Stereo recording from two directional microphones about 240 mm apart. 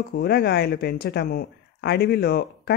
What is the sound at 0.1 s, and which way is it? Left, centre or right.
Speech, left.